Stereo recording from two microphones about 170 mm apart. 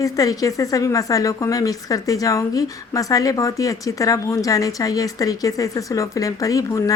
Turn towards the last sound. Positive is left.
turn(degrees=20)  # may be behind; listen again after turning